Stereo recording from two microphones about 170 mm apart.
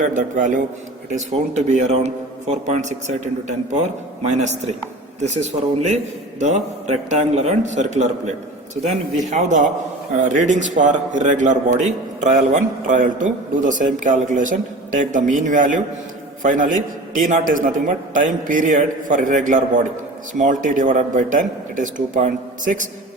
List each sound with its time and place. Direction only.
0.1 s a man's voice: 50° right (ahead or behind)
4.2 s a man's voice: 45° right (ahead or behind)
9.2 s a man's voice: 45° right (ahead or behind)